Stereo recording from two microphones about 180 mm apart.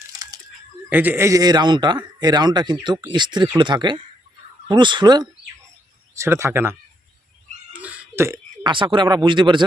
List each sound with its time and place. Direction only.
0.9 s speech: 10° right (ahead or behind)
7.7 s a sound: 10° right (ahead or behind)
8.7 s speech: 25° right (ahead or behind)